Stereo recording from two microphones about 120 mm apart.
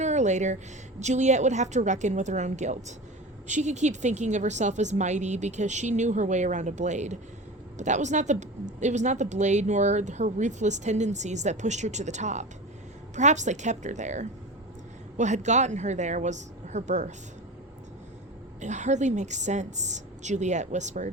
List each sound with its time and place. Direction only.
0.0 s a woman's voice: 75° right (ahead or behind)
18.6 s a woman's voice: 80° right